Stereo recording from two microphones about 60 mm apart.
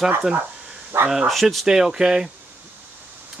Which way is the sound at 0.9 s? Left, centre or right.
Right.